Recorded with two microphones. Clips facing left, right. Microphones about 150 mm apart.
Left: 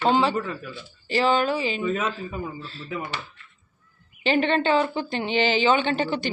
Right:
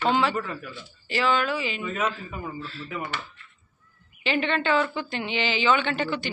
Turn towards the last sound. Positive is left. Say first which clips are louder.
# left 3 dB
turn(degrees=35)  # may be behind; listen again after turning